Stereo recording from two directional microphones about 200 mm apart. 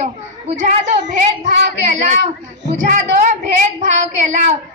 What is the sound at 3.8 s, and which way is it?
Speech, 35° right (ahead or behind).